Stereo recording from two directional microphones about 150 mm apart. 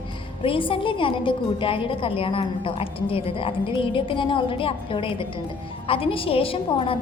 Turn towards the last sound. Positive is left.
turn(degrees=35)  # may be behind; listen again after turning